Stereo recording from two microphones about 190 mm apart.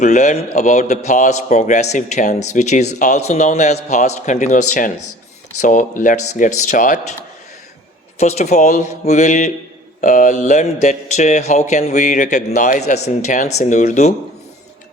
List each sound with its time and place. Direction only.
0.0 s a man's voice: 35° left (ahead or behind)
8.2 s a man's voice: 35° left (ahead or behind)